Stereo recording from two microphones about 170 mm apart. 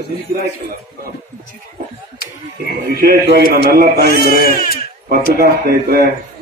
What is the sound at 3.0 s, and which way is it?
A man's voice, 65° right (ahead or behind).